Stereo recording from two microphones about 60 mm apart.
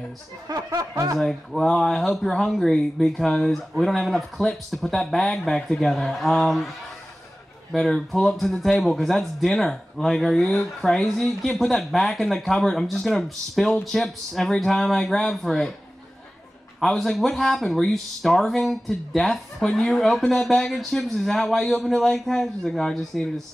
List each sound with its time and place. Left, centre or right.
0.5 s music: right
1.2 s speech: centre
7.7 s speech: centre
16.8 s speech: centre